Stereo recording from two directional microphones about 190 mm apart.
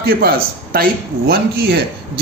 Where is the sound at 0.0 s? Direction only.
55° right (ahead or behind).